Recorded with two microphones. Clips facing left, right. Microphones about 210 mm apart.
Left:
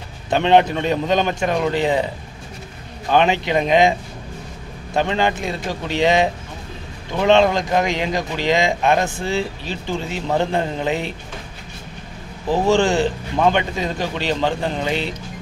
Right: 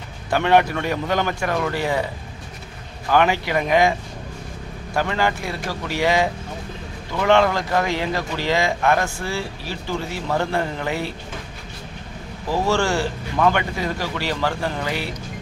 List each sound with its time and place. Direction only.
0.3 s speech: 20° left (ahead or behind)
3.1 s speech: 20° left (ahead or behind)
4.9 s speech: 20° left (ahead or behind)
12.4 s speech: 20° left (ahead or behind)